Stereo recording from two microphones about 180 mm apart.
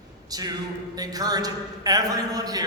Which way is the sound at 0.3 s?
20° right (ahead or behind).